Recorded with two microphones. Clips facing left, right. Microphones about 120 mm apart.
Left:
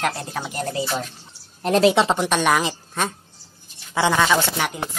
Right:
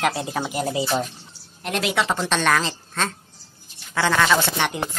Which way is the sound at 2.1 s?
15° left (ahead or behind).